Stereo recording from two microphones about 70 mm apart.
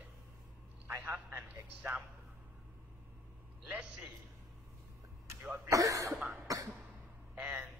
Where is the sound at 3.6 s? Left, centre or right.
Centre.